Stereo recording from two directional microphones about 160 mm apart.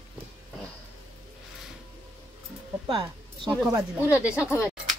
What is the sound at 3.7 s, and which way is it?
Speech, 10° right (ahead or behind).